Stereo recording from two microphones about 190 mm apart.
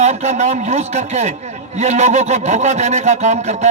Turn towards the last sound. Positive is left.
turn(degrees=-35)  # may be behind; listen again after turning